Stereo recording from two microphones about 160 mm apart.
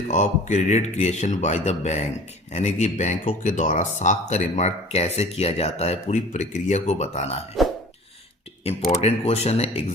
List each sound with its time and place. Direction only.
0.1 s speech: 45° left (ahead or behind)
7.6 s burping: centre (ahead or behind)
8.9 s speech: 40° left (ahead or behind)